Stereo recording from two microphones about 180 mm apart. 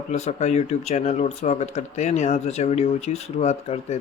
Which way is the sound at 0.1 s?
40° left (ahead or behind).